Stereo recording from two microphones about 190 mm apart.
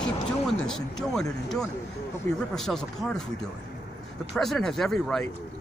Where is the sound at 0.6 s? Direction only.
5° left (ahead or behind).